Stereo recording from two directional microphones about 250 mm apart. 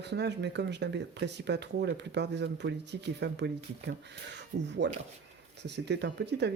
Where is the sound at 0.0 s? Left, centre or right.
Right.